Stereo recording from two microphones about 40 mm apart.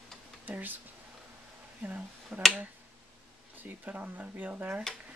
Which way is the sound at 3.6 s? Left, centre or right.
Right.